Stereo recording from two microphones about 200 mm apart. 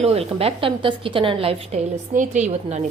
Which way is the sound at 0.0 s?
30° right (ahead or behind).